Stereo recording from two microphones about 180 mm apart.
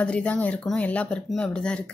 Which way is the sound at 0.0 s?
5° left (ahead or behind).